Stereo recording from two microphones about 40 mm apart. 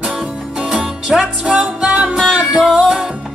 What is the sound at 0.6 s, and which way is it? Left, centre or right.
Music, centre.